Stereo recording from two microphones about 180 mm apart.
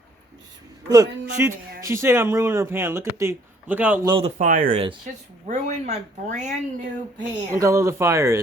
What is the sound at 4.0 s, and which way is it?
Speech, 30° right (ahead or behind).